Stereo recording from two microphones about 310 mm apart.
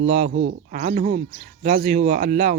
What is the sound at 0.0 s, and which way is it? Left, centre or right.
Speech, right.